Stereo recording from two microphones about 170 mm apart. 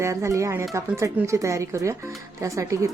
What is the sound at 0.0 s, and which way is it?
Speech, 15° right (ahead or behind).